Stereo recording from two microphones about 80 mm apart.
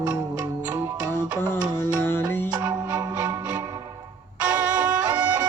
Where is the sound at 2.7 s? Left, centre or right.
Right.